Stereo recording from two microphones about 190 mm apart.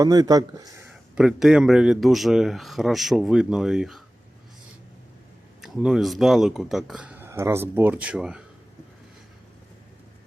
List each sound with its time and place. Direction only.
0.0 s speech: 20° right (ahead or behind)
0.9 s speech: 5° right (ahead or behind)
5.6 s speech: centre (ahead or behind)